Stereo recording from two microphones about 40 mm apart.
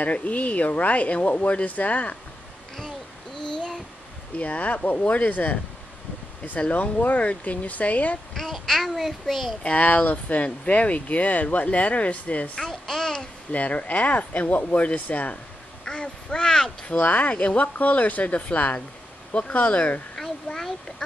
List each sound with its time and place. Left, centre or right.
0.0 s speech: left
4.4 s speech: left
6.7 s speech: left
8.4 s a child's voice: centre
9.6 s speech: left
12.6 s a child's voice: centre
13.5 s speech: left
15.8 s quack: left
16.4 s a child's voice: centre
17.0 s speech: left
20.2 s a sound: centre